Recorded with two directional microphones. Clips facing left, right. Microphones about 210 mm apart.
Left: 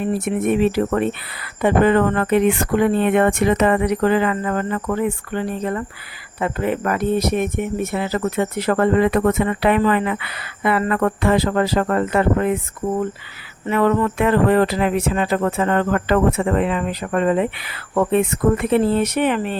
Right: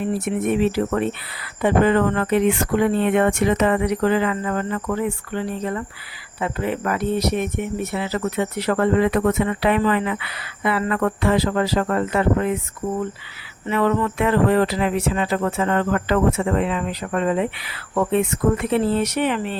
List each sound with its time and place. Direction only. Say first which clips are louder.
0.6 s speech: left 2 dB; 55° left (ahead or behind)
13.7 s speech: left 3 dB; 45° left (ahead or behind)